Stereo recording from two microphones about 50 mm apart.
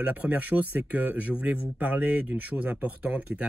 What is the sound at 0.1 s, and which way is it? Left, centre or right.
Speech, right.